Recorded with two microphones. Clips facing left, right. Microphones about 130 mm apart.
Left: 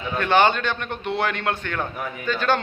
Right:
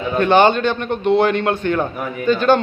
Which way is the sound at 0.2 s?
25° right (ahead or behind).